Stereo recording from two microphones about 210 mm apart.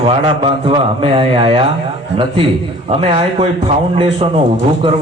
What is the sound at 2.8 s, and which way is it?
A man's voice, 30° right (ahead or behind).